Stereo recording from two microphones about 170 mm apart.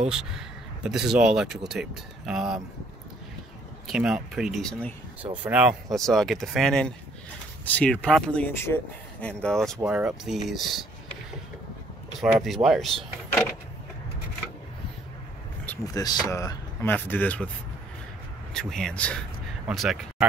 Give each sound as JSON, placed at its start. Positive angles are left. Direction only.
{"t": 0.1, "sound": "speech", "side_deg": -5}
{"t": 3.8, "sound": "speech", "side_deg": -5}
{"t": 5.4, "sound": "speech", "side_deg": -5}
{"t": 12.2, "sound": "speech", "side_deg": 0}
{"t": 15.8, "sound": "speech", "side_deg": 20}
{"t": 18.5, "sound": "speech", "side_deg": 5}